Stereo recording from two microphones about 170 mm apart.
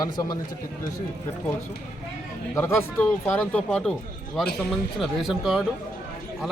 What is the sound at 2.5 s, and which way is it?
Speech, 15° left (ahead or behind).